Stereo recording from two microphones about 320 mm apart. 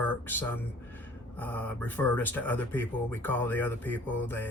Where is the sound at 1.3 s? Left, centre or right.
Centre.